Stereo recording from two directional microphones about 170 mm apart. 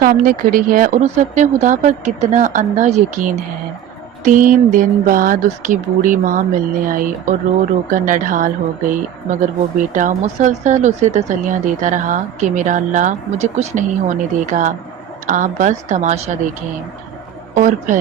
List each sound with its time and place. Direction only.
0.0 s speech: 55° right (ahead or behind)
17.5 s speech: 50° right (ahead or behind)